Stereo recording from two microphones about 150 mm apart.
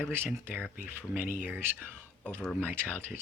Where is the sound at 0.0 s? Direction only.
15° right (ahead or behind).